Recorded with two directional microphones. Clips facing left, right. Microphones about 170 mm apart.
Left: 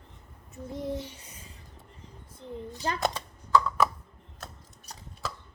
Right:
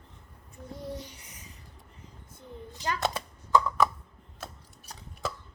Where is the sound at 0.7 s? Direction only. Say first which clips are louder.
Left 6 dB; 25° left (ahead or behind).